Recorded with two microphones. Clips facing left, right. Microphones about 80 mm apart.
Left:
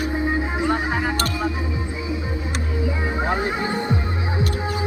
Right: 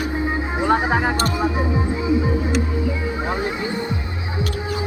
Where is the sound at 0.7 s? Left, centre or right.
Right.